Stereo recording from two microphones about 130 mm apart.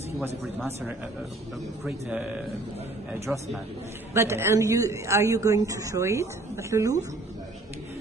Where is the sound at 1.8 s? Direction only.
10° right (ahead or behind).